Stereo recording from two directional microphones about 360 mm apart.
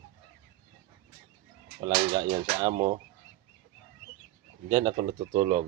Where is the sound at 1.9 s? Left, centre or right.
Centre.